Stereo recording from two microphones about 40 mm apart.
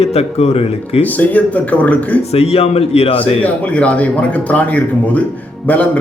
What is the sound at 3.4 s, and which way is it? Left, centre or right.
Speech, left.